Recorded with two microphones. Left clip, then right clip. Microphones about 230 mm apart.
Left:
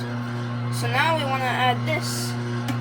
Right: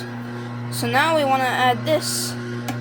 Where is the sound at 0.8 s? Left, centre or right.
Right.